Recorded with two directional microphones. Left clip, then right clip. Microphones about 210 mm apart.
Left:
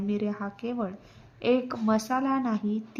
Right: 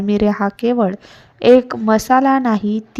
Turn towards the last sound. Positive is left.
turn(degrees=-40)  # may be behind; listen again after turning